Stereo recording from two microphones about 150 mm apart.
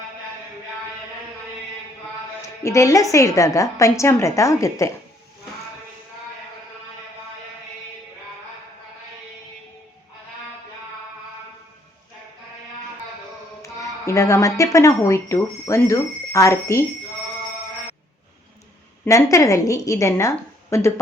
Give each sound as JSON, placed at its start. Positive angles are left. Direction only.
{"t": 2.6, "sound": "a woman's voice", "side_deg": 20}
{"t": 13.6, "sound": "a woman's voice", "side_deg": 20}
{"t": 19.0, "sound": "a woman's voice", "side_deg": 20}